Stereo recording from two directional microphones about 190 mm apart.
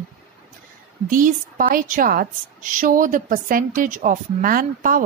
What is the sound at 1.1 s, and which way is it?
A woman's voice, 45° right (ahead or behind).